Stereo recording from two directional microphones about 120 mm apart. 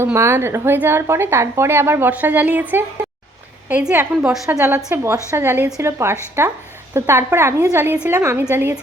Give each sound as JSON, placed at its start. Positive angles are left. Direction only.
{"t": 0.0, "sound": "a woman's voice", "side_deg": -20}
{"t": 4.9, "sound": "a woman's voice", "side_deg": -25}
{"t": 8.2, "sound": "a woman's voice", "side_deg": -25}